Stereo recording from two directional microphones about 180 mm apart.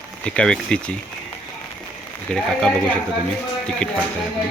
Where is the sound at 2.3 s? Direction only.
5° left (ahead or behind).